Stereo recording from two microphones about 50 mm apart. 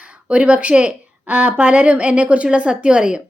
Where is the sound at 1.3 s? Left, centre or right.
Right; by 3.2 s centre.